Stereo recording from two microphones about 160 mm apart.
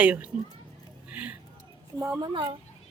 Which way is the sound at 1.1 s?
10° right (ahead or behind).